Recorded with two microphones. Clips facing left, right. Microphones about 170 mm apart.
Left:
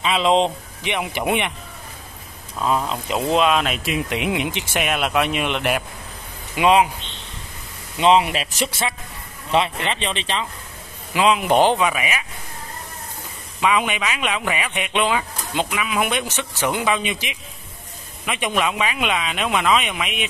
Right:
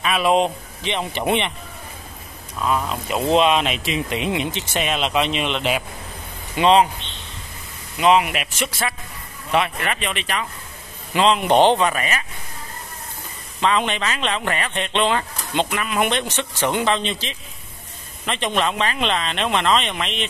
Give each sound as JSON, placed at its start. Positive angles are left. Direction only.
{"t": 0.1, "sound": "speech", "side_deg": 20}
{"t": 0.9, "sound": "speech", "side_deg": 10}
{"t": 3.2, "sound": "speech", "side_deg": 5}
{"t": 8.0, "sound": "speech", "side_deg": 30}
{"t": 11.1, "sound": "speech", "side_deg": 5}
{"t": 13.6, "sound": "speech", "side_deg": 10}